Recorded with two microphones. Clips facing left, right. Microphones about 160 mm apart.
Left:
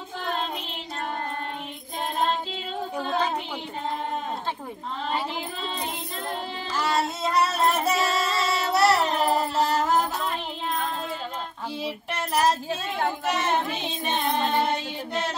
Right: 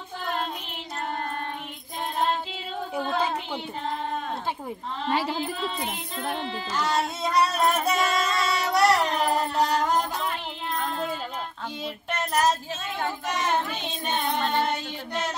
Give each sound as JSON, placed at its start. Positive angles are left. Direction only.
{"t": 3.0, "sound": "child singing", "side_deg": -10}
{"t": 6.7, "sound": "music", "side_deg": 5}
{"t": 8.0, "sound": "singing", "side_deg": 30}
{"t": 8.7, "sound": "music", "side_deg": 5}
{"t": 11.8, "sound": "child singing", "side_deg": 10}
{"t": 14.1, "sound": "child singing", "side_deg": 10}